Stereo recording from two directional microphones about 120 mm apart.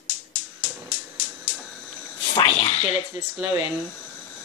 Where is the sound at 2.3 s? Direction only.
55° left (ahead or behind).